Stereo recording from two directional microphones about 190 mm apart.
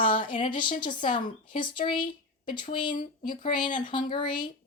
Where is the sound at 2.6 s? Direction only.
45° left (ahead or behind).